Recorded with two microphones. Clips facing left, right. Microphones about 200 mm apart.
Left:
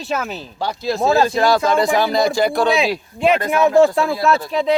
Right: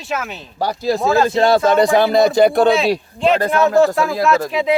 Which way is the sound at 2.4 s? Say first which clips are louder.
Right 5 dB; 55° right (ahead or behind).